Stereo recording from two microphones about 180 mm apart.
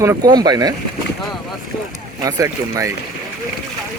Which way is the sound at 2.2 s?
20° right (ahead or behind).